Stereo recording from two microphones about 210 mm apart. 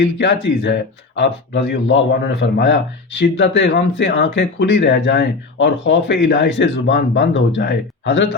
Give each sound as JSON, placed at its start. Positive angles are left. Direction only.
{"t": 0.2, "sound": "speech", "side_deg": 55}